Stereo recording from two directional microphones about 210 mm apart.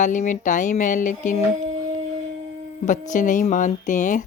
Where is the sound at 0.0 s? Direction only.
35° left (ahead or behind).